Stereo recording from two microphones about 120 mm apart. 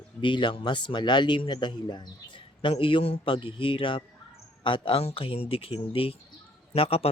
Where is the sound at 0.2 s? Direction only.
40° left (ahead or behind).